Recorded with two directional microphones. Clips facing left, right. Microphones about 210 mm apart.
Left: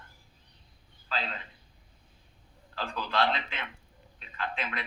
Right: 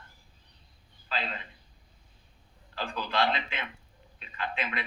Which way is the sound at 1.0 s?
10° right (ahead or behind).